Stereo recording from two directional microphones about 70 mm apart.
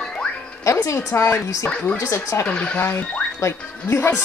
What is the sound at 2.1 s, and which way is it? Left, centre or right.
Speech, left.